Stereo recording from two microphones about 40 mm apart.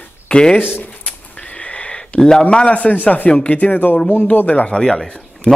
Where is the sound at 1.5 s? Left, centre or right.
Left.